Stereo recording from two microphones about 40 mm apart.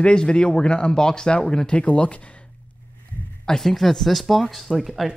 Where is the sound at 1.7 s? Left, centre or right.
Left.